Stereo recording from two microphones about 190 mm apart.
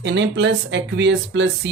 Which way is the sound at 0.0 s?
65° right (ahead or behind).